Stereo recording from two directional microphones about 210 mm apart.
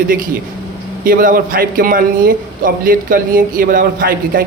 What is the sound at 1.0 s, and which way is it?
A man's voice, 40° right (ahead or behind).